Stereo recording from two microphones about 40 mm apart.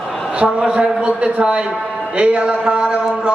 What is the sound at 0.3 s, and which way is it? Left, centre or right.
A man's voice, right.